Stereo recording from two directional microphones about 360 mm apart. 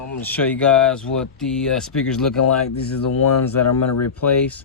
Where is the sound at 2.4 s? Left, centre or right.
Left.